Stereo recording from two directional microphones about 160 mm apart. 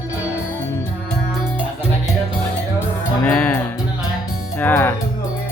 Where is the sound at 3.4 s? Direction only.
15° left (ahead or behind).